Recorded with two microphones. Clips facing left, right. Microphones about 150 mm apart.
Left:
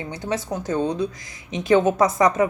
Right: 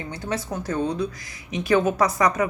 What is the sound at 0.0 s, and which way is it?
A woman's voice, 20° left (ahead or behind).